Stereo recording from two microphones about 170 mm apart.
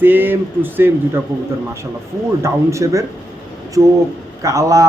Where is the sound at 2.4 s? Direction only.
20° right (ahead or behind).